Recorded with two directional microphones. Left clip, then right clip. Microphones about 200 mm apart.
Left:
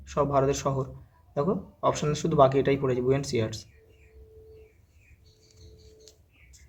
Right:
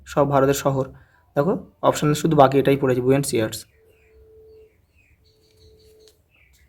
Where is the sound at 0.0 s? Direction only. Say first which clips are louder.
Right 7 dB; 45° right (ahead or behind).